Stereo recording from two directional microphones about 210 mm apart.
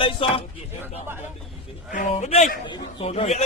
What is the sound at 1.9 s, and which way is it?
Speech, 35° left (ahead or behind).